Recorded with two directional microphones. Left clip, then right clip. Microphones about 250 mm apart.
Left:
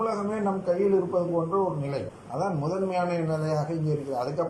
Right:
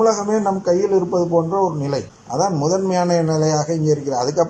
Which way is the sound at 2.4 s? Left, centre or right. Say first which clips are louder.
Right 10 dB; right.